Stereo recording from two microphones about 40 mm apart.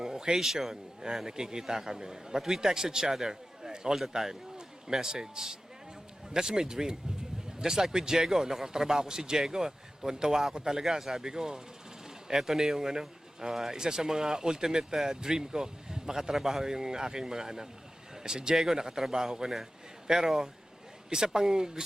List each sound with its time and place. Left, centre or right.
0.0 s speech: centre
0.7 s a man's voice: centre